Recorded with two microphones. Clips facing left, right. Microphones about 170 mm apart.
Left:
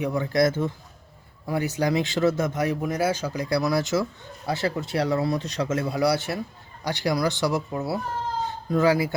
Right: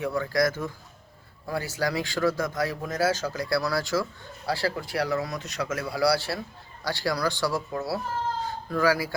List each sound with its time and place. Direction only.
0.0 s speech: 20° left (ahead or behind)